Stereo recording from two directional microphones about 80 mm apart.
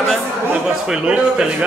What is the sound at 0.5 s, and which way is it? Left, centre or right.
Speech, centre.